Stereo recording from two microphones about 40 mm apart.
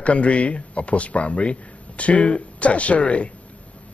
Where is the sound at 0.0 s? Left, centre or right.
Left.